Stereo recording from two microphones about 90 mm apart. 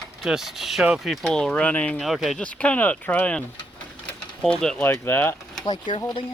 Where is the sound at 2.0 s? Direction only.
Centre (ahead or behind).